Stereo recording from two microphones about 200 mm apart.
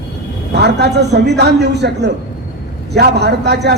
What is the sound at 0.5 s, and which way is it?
A man's voice, 55° right (ahead or behind).